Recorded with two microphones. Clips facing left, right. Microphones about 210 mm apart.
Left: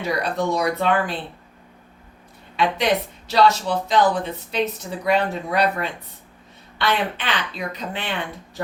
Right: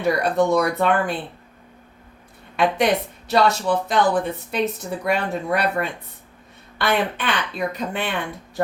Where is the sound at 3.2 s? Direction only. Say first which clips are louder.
Even; 55° right (ahead or behind).